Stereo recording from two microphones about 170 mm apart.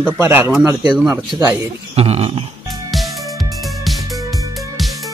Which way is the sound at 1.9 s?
40° right (ahead or behind).